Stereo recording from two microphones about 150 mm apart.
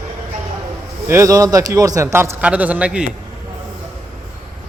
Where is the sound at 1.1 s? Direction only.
20° right (ahead or behind).